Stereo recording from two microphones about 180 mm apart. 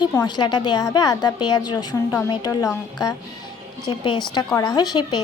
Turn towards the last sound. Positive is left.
turn(degrees=20)  # may be behind; listen again after turning